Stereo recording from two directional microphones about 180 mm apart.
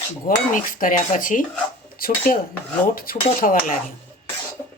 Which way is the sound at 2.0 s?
55° left (ahead or behind).